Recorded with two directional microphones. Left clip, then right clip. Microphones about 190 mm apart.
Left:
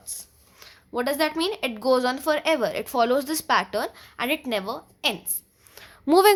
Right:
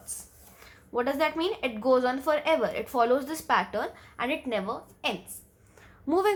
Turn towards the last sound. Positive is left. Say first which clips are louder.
# left 8 dB
turn(degrees=45)  # may be behind; listen again after turning